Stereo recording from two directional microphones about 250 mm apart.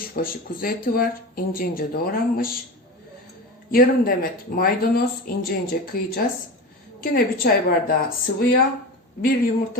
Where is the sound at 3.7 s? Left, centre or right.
Left.